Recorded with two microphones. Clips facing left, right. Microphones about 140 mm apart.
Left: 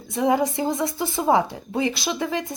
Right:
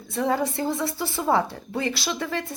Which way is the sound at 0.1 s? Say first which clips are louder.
Left 4 dB; 15° left (ahead or behind).